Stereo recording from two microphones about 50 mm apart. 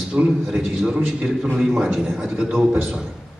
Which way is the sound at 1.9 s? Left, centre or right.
Centre.